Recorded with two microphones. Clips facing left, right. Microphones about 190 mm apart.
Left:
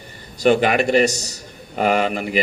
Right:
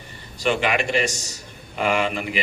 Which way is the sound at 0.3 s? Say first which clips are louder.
Left 6 dB; 40° left (ahead or behind).